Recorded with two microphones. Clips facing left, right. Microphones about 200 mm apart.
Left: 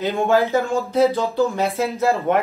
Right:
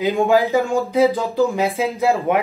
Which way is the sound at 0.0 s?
15° right (ahead or behind).